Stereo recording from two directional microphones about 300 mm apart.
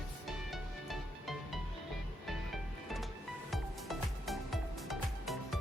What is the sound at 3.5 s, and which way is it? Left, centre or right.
Music, centre.